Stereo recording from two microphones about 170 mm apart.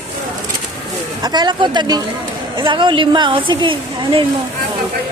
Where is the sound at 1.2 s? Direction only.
25° right (ahead or behind).